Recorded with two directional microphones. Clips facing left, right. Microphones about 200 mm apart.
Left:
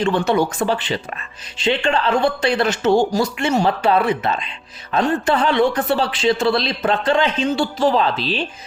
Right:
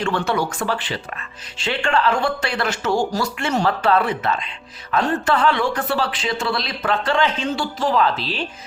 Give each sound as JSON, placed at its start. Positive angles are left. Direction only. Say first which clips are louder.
{"t": 0.0, "sound": "speech", "louder": "left 4 dB", "side_deg": 20}